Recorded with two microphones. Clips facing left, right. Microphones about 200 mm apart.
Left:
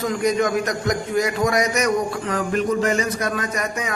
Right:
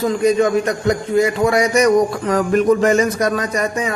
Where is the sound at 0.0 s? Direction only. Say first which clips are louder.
Right 5 dB; 30° right (ahead or behind).